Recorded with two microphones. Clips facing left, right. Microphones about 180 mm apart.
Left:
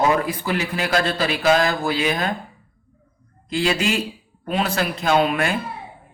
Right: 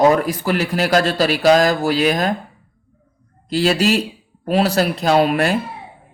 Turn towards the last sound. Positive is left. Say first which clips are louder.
# right 4 dB
turn(degrees=-35)  # may be behind; listen again after turning